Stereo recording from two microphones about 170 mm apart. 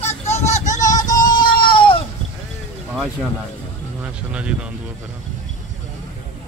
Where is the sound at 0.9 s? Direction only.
20° left (ahead or behind).